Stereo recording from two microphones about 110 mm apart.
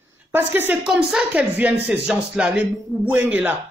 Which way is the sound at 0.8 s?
5° right (ahead or behind).